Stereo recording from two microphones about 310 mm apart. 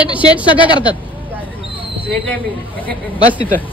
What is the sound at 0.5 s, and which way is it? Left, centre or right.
Speech, centre.